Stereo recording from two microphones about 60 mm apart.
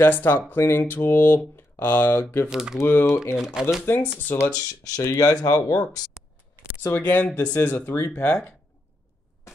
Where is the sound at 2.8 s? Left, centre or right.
Left.